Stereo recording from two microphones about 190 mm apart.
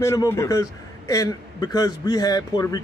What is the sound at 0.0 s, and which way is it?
A man's voice, 15° left (ahead or behind).